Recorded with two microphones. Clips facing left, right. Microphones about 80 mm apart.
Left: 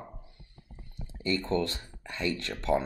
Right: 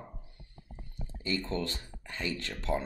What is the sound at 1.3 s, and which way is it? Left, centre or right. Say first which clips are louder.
Speech: left 5 dB; left.